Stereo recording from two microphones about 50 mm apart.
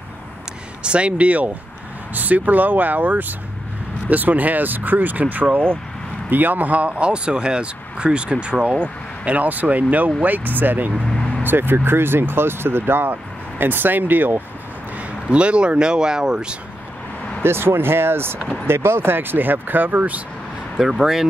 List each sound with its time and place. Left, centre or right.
0.8 s speech: right
11.1 s vehicle: centre
11.4 s speech: right
15.0 s speech: right
17.4 s speech: right
20.7 s speech: centre